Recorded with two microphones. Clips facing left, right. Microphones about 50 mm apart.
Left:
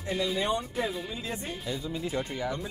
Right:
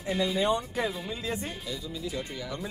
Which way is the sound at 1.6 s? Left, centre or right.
Left.